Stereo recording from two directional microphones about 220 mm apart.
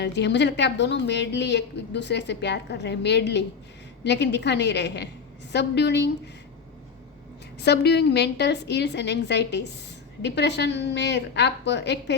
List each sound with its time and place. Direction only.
0.0 s a woman's voice: 50° left (ahead or behind)
7.6 s a woman's voice: 50° left (ahead or behind)